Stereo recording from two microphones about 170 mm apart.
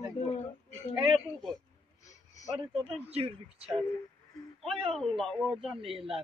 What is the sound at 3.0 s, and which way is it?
Speech, 35° right (ahead or behind).